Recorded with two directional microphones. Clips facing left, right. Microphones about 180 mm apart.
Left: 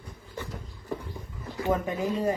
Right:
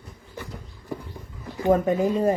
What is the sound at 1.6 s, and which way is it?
Speech, 50° right (ahead or behind).